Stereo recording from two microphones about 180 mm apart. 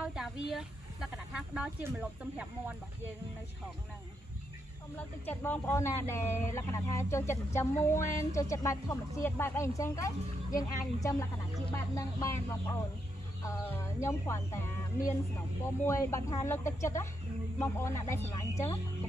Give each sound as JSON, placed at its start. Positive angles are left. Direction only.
{"t": 0.0, "sound": "a sound", "side_deg": -5}
{"t": 0.6, "sound": "speech", "side_deg": 0}
{"t": 4.9, "sound": "speech", "side_deg": 10}